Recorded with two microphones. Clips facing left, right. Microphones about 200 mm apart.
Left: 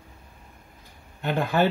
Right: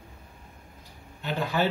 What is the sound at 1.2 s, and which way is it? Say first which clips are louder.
Speech: left 4 dB; 55° left (ahead or behind).